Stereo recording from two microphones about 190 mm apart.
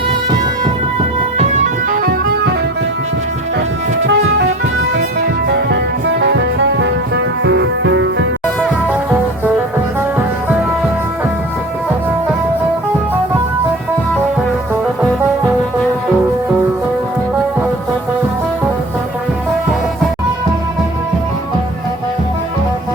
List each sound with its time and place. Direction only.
1.4 s music: 40° right (ahead or behind); by 2.6 s 60° right (ahead or behind)
4.0 s music: 70° right (ahead or behind)
5.5 s music: 65° right (ahead or behind); by 8.3 s 80° right